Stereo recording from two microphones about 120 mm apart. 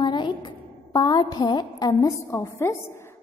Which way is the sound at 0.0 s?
40° left (ahead or behind).